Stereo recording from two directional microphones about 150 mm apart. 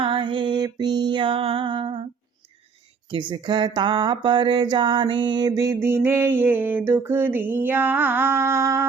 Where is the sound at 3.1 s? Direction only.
30° right (ahead or behind).